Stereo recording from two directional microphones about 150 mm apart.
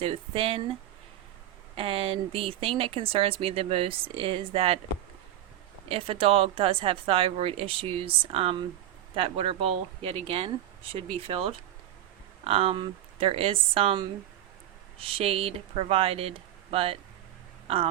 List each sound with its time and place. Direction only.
0.0 s speech: 40° right (ahead or behind)
5.9 s speech: 40° right (ahead or behind)